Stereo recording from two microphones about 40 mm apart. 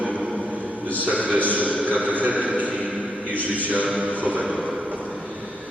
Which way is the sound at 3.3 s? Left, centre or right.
Right.